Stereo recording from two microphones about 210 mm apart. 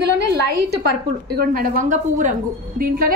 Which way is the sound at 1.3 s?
40° right (ahead or behind).